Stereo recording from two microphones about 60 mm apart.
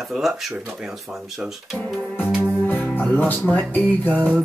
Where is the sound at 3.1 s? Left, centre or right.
Left.